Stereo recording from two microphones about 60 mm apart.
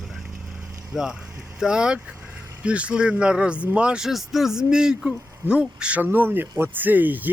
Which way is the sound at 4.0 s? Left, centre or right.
Centre.